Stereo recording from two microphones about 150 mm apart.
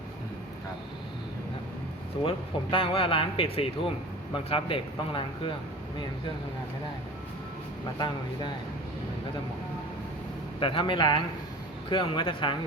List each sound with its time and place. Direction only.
2.2 s a man's voice: 35° left (ahead or behind)
10.6 s a man's voice: 35° left (ahead or behind)